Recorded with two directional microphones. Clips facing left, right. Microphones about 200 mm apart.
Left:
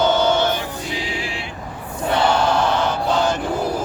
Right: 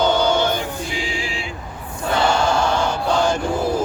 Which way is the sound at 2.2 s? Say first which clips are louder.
Even; 10° right (ahead or behind).